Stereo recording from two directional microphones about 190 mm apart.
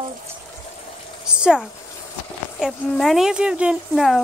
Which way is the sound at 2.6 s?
Centre (ahead or behind).